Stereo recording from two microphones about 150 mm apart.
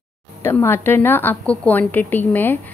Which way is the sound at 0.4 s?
15° left (ahead or behind).